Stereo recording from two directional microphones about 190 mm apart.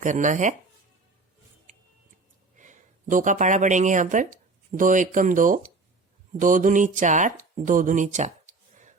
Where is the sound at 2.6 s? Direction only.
40° right (ahead or behind).